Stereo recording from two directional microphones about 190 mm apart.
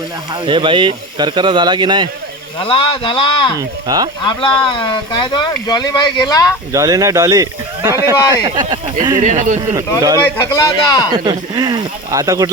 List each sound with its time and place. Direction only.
0.4 s speech: 25° right (ahead or behind)
2.6 s speech: 30° left (ahead or behind)
3.8 s speech: 20° right (ahead or behind)
4.3 s speech: 25° left (ahead or behind)
6.7 s speech: 15° right (ahead or behind)
9.2 s speech: 40° right (ahead or behind)
10.2 s speech: 15° left (ahead or behind)
11.1 s speech: 20° right (ahead or behind)